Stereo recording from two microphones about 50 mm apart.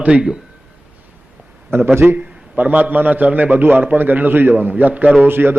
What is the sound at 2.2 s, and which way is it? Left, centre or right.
A man's voice, right.